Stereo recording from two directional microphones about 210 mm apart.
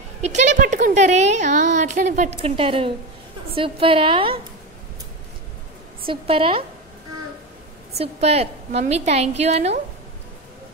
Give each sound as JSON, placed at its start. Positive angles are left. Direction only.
{"t": 0.6, "sound": "a woman's voice", "side_deg": -35}
{"t": 6.0, "sound": "a woman's voice", "side_deg": -25}
{"t": 8.0, "sound": "a woman's voice", "side_deg": -30}